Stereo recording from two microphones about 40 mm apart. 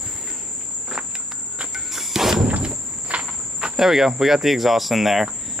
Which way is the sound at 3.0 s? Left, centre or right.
Right.